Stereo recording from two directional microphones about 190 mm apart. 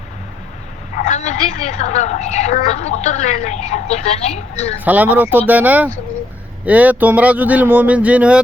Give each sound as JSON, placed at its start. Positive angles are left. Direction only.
{"t": 0.9, "sound": "speech", "side_deg": 40}
{"t": 4.9, "sound": "speech", "side_deg": -10}